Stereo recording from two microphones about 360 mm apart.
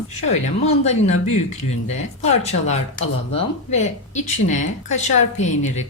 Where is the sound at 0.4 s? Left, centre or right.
Centre.